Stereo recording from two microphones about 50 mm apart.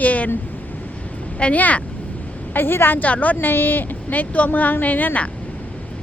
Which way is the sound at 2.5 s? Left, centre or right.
Left.